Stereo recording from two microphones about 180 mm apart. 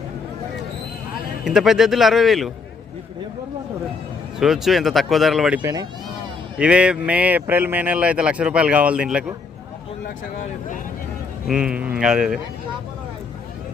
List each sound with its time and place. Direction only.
1.5 s speech: centre (ahead or behind)
4.4 s speech: centre (ahead or behind)
5.6 s speech: 20° right (ahead or behind)
6.6 s speech: 5° right (ahead or behind)
11.4 s speech: 5° right (ahead or behind)